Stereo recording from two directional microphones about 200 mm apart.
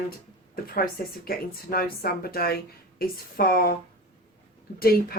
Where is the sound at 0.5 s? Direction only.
45° left (ahead or behind).